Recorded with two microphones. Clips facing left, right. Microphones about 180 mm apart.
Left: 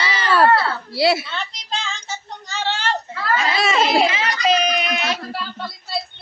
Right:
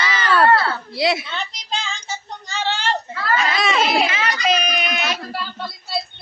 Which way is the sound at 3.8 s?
30° left (ahead or behind).